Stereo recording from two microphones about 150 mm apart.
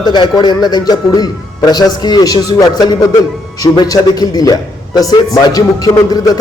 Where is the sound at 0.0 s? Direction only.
30° left (ahead or behind).